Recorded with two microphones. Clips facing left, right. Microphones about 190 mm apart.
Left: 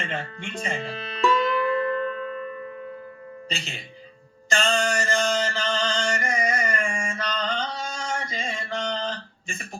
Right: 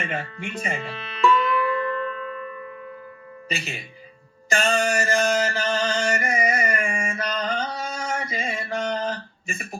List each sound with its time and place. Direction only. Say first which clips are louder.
0.0 s speech: right 2 dB; 10° right (ahead or behind)
0.8 s music: right 2 dB; 35° left (ahead or behind)
3.5 s speech: right 5 dB; 10° right (ahead or behind)
4.4 s mantra: right 2 dB; 10° right (ahead or behind)